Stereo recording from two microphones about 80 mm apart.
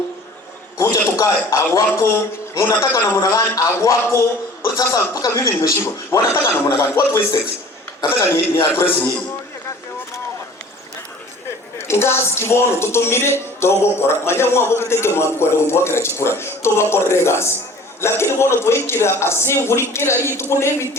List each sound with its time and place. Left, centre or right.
0.8 s a man's voice: left
3.2 s a man's voice: left
11.8 s a man's voice: left